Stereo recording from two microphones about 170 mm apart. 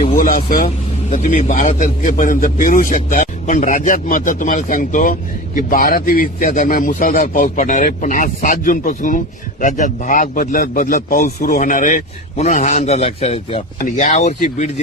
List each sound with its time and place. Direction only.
0.1 s vehicle: 55° left (ahead or behind)
1.1 s a man's voice: 40° left (ahead or behind)
13.7 s a man's voice: 45° left (ahead or behind)